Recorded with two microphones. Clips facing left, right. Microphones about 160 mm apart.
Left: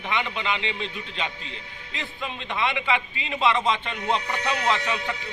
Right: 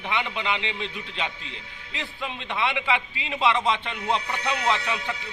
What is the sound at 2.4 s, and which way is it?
A man's voice, 5° right (ahead or behind).